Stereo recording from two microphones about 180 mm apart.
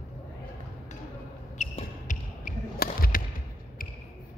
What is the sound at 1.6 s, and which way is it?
Basketball bounce, 40° left (ahead or behind).